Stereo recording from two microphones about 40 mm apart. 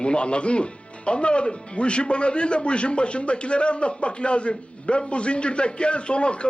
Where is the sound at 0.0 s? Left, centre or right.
Left.